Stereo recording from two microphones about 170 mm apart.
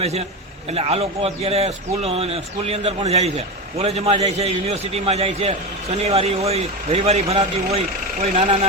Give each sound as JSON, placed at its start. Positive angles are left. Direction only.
{"t": 0.0, "sound": "a man's voice", "side_deg": -35}